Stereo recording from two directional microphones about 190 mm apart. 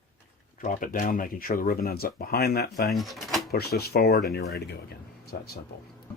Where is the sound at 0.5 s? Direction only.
45° left (ahead or behind).